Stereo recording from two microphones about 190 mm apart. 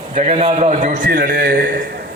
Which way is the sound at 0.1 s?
35° right (ahead or behind).